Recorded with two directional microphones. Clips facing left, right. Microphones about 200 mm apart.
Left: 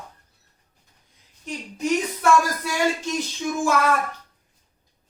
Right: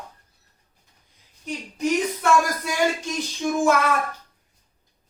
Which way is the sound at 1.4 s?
Centre (ahead or behind).